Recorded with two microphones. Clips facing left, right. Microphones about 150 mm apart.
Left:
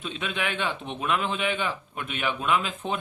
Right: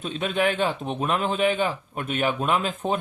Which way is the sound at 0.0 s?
40° right (ahead or behind).